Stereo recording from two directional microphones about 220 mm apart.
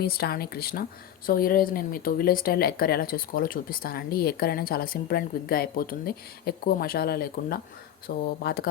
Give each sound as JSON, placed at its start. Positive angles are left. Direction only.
{"t": 0.0, "sound": "speech", "side_deg": 45}